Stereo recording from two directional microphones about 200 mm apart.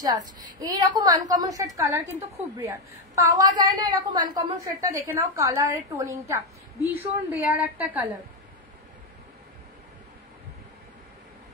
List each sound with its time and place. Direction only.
0.0 s a woman's voice: 20° right (ahead or behind)